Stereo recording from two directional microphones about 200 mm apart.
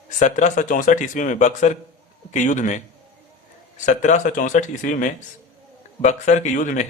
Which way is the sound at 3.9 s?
40° left (ahead or behind).